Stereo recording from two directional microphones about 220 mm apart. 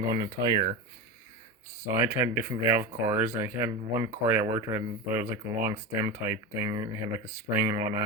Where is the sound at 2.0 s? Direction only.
10° right (ahead or behind).